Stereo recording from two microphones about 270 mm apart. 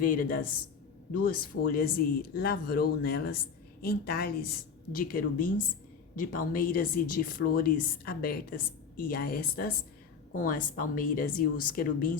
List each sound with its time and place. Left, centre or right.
0.0 s speech: left